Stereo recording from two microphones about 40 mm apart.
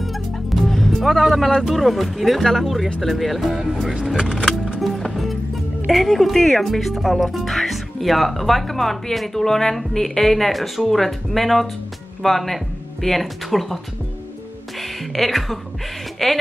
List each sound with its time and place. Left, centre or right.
0.0 s music: centre
1.6 s speech: centre
4.2 s speech: centre
4.7 s music: centre
5.9 s speech: centre
14.8 s music: centre
16.2 s speech: centre